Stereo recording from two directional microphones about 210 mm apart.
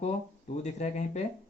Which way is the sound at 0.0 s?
35° left (ahead or behind).